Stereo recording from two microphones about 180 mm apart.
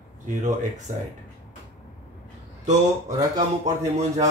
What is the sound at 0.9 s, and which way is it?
Speech, 45° right (ahead or behind).